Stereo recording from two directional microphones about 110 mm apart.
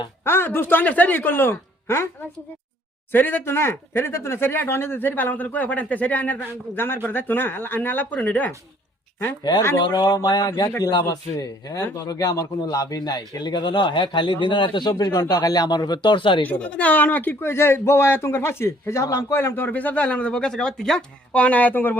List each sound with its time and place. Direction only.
0.3 s speech: 20° left (ahead or behind)
3.1 s speech: 15° left (ahead or behind)
9.4 s a man's voice: 40° left (ahead or behind)
16.5 s speech: 10° left (ahead or behind)